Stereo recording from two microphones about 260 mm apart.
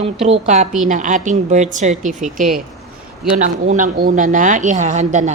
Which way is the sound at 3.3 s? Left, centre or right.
Right.